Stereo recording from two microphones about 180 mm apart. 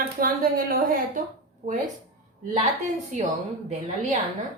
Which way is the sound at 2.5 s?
45° right (ahead or behind).